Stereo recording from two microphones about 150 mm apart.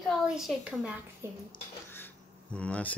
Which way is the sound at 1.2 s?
15° right (ahead or behind).